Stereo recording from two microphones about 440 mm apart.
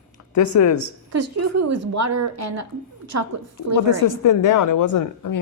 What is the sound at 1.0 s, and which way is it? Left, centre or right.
A woman's voice, right.